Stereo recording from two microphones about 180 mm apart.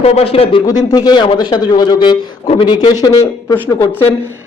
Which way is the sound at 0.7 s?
20° left (ahead or behind).